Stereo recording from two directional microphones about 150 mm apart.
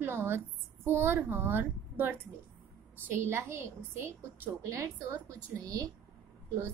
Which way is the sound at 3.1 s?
20° right (ahead or behind).